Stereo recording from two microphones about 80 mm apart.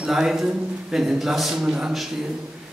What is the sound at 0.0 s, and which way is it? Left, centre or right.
A man's voice, centre.